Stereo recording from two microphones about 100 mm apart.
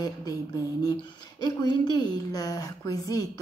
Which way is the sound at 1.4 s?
45° left (ahead or behind).